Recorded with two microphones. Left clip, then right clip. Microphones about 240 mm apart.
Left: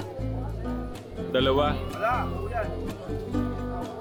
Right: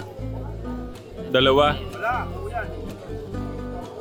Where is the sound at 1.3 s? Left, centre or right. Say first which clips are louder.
Right 6 dB; right.